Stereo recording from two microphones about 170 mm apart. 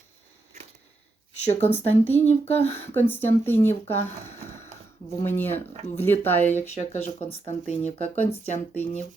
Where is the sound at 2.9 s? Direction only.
15° left (ahead or behind).